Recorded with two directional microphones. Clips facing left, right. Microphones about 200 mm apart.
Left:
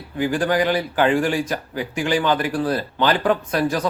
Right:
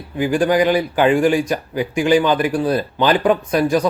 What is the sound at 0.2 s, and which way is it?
A man's voice, 15° right (ahead or behind).